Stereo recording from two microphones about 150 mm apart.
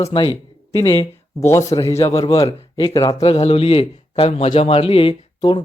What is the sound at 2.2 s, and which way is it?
Speech, 40° left (ahead or behind).